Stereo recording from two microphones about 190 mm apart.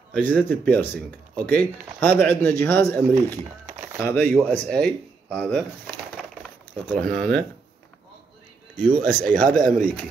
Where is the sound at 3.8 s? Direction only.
10° right (ahead or behind).